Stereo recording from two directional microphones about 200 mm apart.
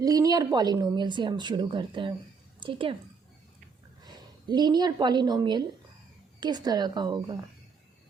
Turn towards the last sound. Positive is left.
turn(degrees=-20)  # may be behind; listen again after turning